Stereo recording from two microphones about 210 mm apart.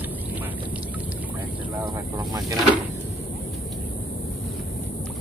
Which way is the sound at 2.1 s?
15° right (ahead or behind).